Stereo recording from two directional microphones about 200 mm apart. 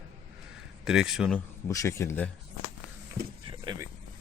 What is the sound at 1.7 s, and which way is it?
Speech, 15° left (ahead or behind).